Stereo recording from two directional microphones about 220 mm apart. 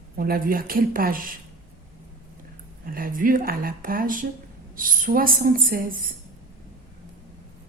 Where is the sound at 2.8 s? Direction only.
40° right (ahead or behind).